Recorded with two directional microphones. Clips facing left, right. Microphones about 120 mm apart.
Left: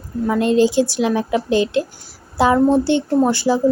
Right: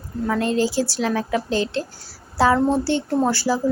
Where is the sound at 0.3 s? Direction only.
20° left (ahead or behind).